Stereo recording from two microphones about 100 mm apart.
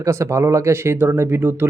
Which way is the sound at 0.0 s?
30° right (ahead or behind).